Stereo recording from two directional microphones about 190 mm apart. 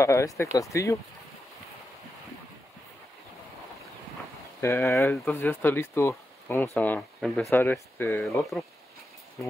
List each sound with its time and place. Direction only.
0.0 s speech: 15° left (ahead or behind)
4.6 s speech: 15° left (ahead or behind)